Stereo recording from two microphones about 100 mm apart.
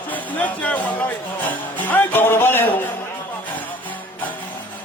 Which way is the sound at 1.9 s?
20° left (ahead or behind).